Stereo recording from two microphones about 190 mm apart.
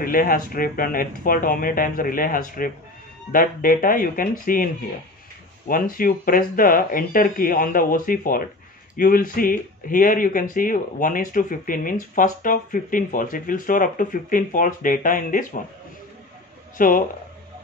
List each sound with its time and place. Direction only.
0.0 s speech: 50° left (ahead or behind)
5.7 s speech: 50° left (ahead or behind)
16.7 s speech: 45° left (ahead or behind)